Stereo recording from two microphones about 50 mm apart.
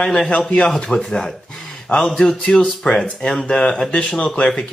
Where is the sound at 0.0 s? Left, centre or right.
Centre.